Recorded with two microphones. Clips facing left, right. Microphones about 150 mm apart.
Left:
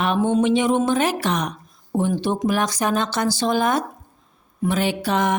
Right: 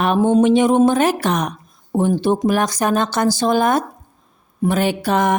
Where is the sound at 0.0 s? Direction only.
40° right (ahead or behind).